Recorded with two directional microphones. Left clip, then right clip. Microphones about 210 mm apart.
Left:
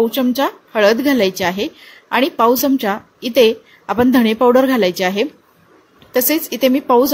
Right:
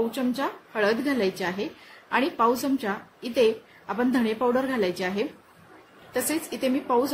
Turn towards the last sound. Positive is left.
turn(degrees=35)  # may be behind; listen again after turning